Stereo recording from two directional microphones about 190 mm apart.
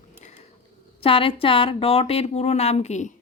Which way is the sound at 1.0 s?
30° left (ahead or behind).